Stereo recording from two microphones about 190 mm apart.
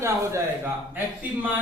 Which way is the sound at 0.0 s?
15° right (ahead or behind).